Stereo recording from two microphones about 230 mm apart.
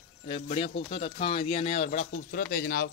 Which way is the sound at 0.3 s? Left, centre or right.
Left.